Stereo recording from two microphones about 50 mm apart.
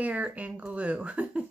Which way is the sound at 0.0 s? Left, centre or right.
Right.